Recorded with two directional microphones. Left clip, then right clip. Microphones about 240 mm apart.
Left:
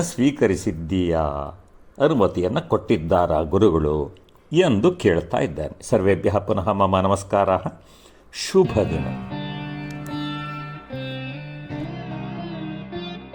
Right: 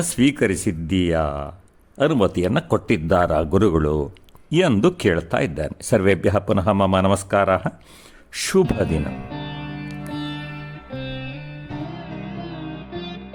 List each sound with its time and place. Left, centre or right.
0.0 s speech: right
8.9 s music: centre